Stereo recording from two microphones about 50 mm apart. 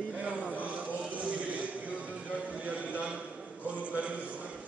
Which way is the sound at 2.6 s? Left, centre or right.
Right.